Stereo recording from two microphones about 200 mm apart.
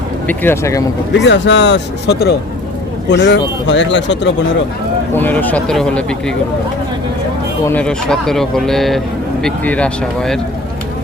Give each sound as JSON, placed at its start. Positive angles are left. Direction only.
{"t": 0.3, "sound": "speech", "side_deg": 10}
{"t": 1.2, "sound": "speech", "side_deg": 60}
{"t": 5.1, "sound": "speech", "side_deg": 10}
{"t": 7.6, "sound": "speech", "side_deg": 10}